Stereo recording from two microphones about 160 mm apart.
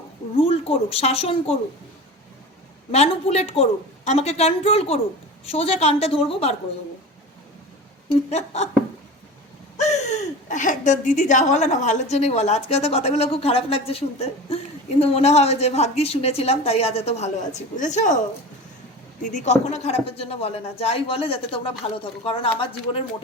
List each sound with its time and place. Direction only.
0.3 s a woman's voice: 35° left (ahead or behind)
2.9 s a woman's voice: 40° left (ahead or behind)
8.3 s speech: 45° left (ahead or behind)
9.7 s a woman's voice: 45° left (ahead or behind)
19.2 s a woman's voice: 50° left (ahead or behind)